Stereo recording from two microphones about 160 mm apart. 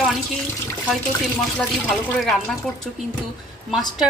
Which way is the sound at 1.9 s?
Centre (ahead or behind).